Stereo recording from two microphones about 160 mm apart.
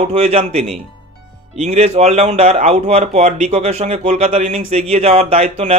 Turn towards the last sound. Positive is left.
turn(degrees=-40)  # may be behind; listen again after turning